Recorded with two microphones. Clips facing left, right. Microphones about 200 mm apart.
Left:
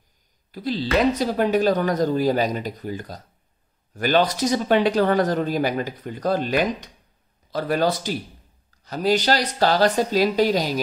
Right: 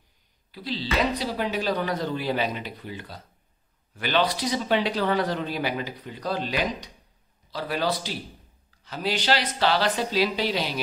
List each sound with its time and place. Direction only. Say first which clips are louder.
0.5 s speech: left 7 dB; 45° left (ahead or behind)